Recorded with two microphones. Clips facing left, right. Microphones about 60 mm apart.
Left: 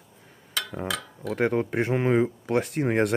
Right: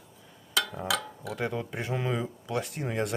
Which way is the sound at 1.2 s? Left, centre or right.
Left.